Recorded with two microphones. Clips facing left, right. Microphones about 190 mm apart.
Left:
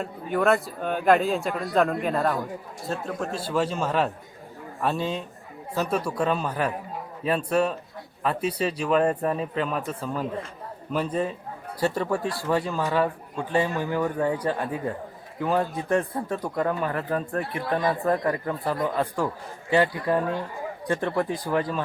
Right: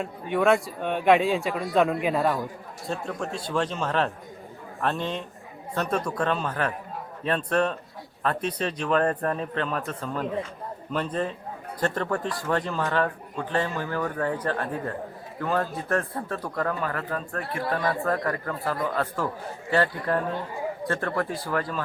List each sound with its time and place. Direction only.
0.0 s a man's voice: centre (ahead or behind)
16.0 s a man's voice: 5° left (ahead or behind)
16.4 s a man's voice: 20° left (ahead or behind)